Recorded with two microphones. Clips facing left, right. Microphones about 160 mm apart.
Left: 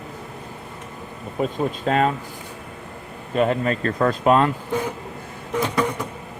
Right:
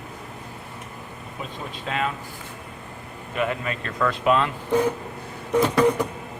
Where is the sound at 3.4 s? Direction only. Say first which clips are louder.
Left 6 dB; 35° left (ahead or behind).